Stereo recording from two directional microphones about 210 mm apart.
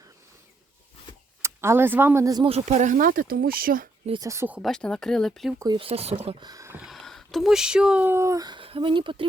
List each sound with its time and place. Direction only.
1.4 s speech: 10° right (ahead or behind); by 3.8 s 45° right (ahead or behind)
4.0 s speech: 20° right (ahead or behind); by 5.5 s centre (ahead or behind)
5.5 s speech: 20° right (ahead or behind)